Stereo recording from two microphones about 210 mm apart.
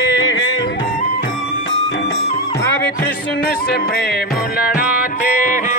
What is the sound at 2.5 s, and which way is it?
Music, 15° left (ahead or behind).